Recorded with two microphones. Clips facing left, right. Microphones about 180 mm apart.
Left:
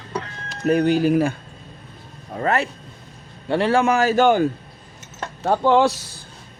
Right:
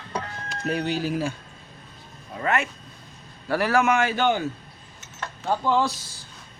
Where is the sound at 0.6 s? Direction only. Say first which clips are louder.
Left 9 dB; 50° left (ahead or behind).